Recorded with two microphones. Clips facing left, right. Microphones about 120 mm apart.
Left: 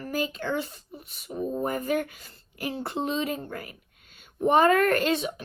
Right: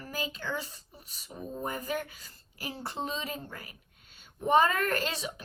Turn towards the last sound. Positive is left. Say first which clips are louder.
# left 8 dB
turn(degrees=50)  # may be behind; listen again after turning